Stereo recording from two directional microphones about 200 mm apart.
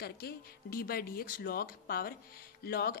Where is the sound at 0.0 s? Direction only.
50° left (ahead or behind).